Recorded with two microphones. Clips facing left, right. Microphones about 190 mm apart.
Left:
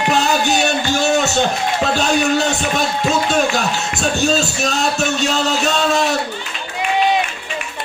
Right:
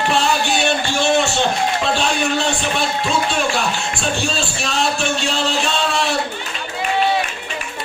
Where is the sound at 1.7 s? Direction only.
40° left (ahead or behind).